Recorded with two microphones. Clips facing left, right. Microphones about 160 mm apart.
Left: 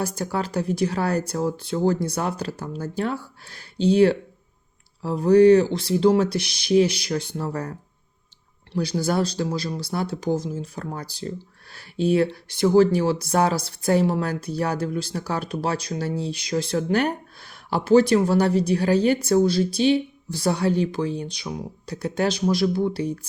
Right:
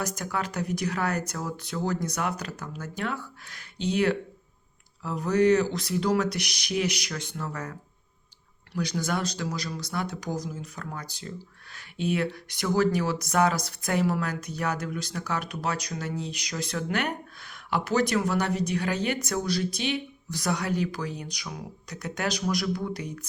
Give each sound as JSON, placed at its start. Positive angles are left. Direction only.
{"t": 0.0, "sound": "speech", "side_deg": 30}